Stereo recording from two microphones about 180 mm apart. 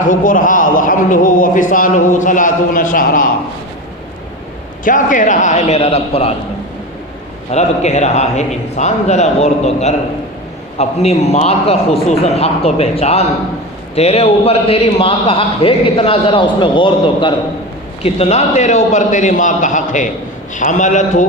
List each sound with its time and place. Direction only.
0.1 s a man's voice: 50° left (ahead or behind)
4.8 s a man's voice: 45° left (ahead or behind)
7.5 s a man's voice: 40° left (ahead or behind)
18.0 s a man's voice: 35° left (ahead or behind)